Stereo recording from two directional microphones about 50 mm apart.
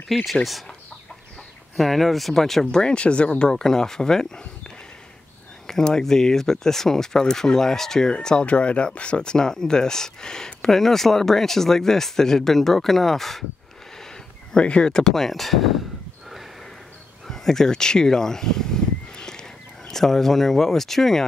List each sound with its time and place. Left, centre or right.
0.1 s speech: centre
1.8 s speech: centre
2.7 s speech: centre
5.7 s speech: centre
14.5 s speech: centre
17.3 s a sound: centre
19.9 s speech: centre